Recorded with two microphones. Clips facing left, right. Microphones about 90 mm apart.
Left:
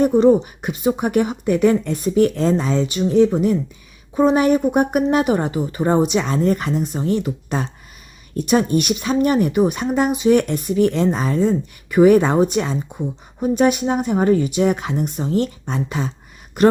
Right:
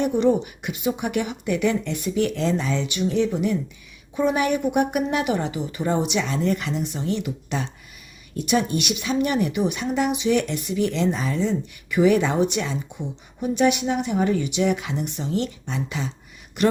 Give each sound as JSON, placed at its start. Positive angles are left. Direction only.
{"t": 0.0, "sound": "speech", "side_deg": 40}